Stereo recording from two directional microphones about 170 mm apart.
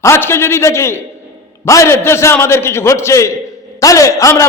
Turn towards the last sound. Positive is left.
turn(degrees=20)  # may be behind; listen again after turning